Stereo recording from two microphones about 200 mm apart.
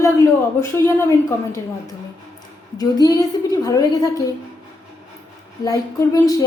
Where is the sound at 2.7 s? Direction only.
20° left (ahead or behind).